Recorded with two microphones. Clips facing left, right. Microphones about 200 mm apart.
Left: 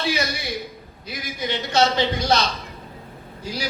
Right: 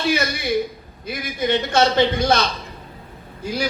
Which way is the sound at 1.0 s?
55° right (ahead or behind).